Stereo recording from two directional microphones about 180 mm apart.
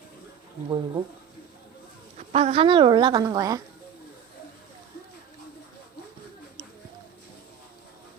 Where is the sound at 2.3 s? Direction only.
35° right (ahead or behind).